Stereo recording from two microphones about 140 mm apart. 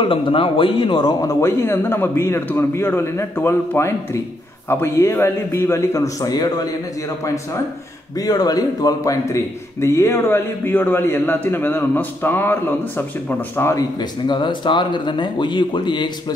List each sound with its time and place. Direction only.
0.0 s a man's voice: 40° left (ahead or behind)
8.2 s a man's voice: 30° left (ahead or behind)
13.9 s speech: 30° left (ahead or behind)